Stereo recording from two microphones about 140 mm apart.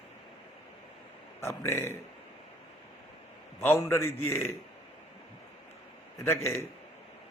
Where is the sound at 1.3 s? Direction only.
20° left (ahead or behind).